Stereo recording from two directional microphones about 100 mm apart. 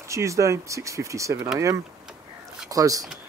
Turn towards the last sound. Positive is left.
turn(degrees=-35)  # may be behind; listen again after turning